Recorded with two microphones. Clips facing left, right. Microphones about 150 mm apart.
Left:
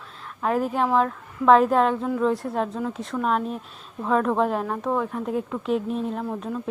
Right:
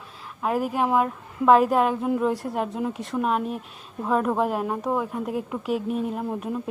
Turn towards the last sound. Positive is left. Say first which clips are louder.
# even
turn(degrees=-15)  # may be behind; listen again after turning